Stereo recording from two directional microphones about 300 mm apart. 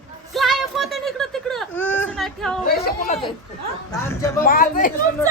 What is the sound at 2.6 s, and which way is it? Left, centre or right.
Speech, left.